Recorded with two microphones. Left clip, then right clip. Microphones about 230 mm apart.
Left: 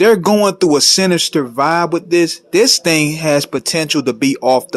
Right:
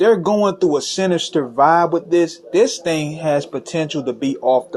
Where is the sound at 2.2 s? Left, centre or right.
Left.